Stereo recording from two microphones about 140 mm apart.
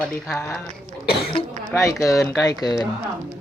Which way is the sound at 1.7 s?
20° left (ahead or behind).